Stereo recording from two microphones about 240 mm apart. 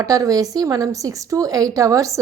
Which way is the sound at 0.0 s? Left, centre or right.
Centre.